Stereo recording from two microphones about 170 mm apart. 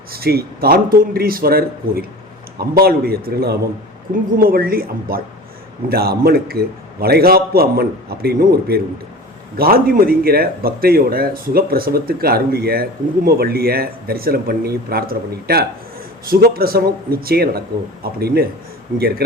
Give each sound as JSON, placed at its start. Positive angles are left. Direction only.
{"t": 0.1, "sound": "speech", "side_deg": -65}